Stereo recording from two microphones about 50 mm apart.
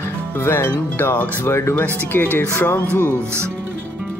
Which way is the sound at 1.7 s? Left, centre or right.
Left.